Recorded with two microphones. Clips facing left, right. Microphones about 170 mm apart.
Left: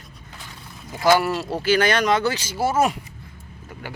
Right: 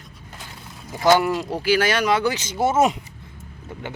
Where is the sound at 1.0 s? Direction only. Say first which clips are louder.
Right 1 dB; 20° right (ahead or behind).